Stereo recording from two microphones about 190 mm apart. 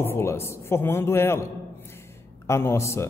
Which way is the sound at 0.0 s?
15° left (ahead or behind).